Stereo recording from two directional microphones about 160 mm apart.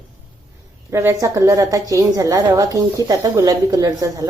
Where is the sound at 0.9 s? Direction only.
15° right (ahead or behind).